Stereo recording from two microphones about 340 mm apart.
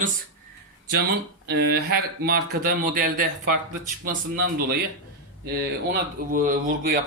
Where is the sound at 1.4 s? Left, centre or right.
Right.